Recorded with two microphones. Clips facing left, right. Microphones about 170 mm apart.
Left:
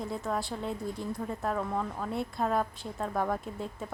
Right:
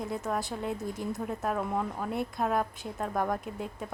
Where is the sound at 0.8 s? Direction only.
20° right (ahead or behind).